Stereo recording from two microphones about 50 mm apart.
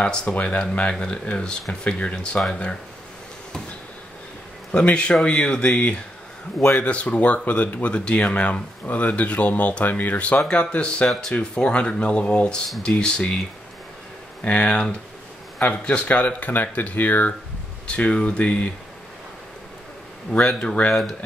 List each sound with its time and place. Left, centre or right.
0.0 s speech: centre
4.7 s speech: left
10.1 s speech: left
14.4 s speech: left
17.8 s speech: left
20.3 s speech: left
20.9 s speech: centre